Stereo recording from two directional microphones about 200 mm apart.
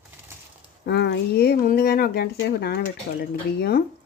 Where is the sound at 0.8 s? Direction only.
55° left (ahead or behind).